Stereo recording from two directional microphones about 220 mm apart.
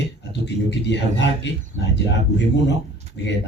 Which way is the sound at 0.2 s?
50° left (ahead or behind).